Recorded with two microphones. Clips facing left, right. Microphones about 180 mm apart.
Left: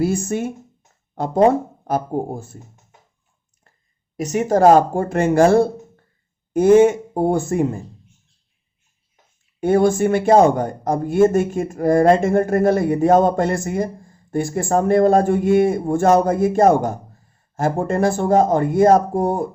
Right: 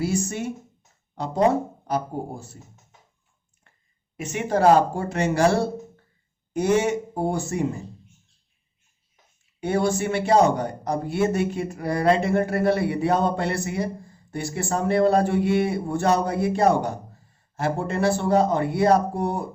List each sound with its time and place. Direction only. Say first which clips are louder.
0.0 s speech: left 5 dB; 50° left (ahead or behind)
4.2 s speech: left 6 dB; 40° left (ahead or behind)
9.6 s speech: left 7 dB; 50° left (ahead or behind)